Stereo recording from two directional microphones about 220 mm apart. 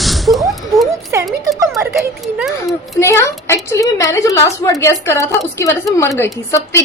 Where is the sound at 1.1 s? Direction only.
15° right (ahead or behind).